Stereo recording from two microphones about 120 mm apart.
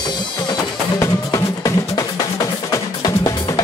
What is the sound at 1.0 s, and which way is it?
Music, 25° left (ahead or behind).